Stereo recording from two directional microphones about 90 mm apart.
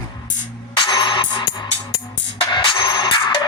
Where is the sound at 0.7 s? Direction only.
60° left (ahead or behind).